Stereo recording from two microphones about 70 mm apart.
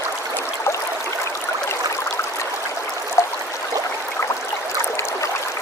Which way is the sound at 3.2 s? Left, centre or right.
Left.